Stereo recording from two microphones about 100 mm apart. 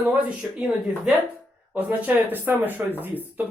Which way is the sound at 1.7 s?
15° right (ahead or behind).